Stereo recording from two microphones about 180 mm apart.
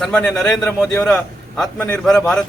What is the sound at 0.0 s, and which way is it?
A man's voice, 5° left (ahead or behind).